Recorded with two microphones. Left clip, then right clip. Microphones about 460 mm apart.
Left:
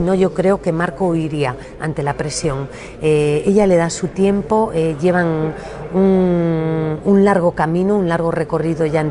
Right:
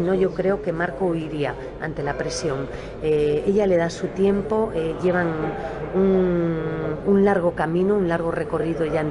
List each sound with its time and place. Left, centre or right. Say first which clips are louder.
0.1 s speech: left 7 dB; left